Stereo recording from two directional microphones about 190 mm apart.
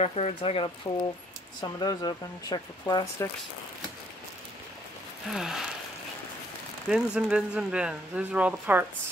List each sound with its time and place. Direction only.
0.0 s speech: 35° left (ahead or behind)
5.3 s a sound: 5° right (ahead or behind)
6.9 s speech: 5° right (ahead or behind)